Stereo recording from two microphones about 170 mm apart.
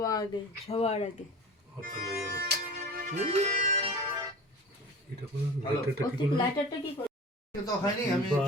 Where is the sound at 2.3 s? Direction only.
60° right (ahead or behind).